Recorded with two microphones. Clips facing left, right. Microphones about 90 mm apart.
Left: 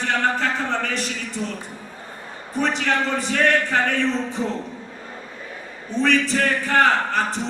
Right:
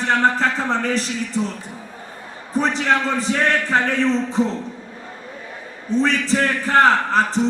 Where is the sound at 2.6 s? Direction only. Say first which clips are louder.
Right 3 dB; 35° right (ahead or behind).